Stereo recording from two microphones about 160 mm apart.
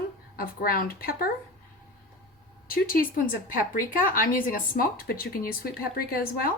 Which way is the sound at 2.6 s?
65° left (ahead or behind).